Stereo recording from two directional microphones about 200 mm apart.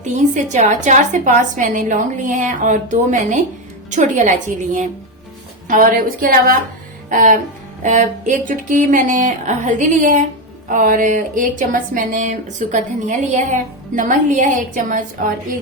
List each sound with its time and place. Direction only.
0.0 s a woman's voice: 35° right (ahead or behind)